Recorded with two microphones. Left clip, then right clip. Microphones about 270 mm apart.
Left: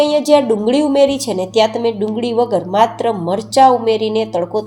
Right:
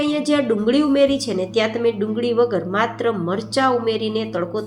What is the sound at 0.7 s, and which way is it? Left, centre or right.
Speech, centre.